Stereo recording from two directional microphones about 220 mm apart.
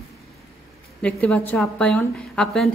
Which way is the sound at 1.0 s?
5° left (ahead or behind).